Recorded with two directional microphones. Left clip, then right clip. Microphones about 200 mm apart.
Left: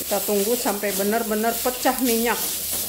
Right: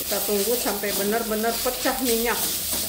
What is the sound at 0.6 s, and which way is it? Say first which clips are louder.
Stir: left 2 dB; 35° left (ahead or behind).